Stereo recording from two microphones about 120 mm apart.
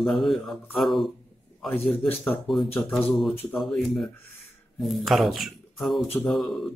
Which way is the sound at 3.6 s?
Centre (ahead or behind).